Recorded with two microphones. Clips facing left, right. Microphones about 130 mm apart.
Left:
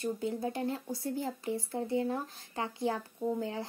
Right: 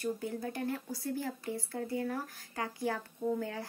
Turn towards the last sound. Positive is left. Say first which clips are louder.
# left 1 dB
turn(degrees=15)  # may be behind; listen again after turning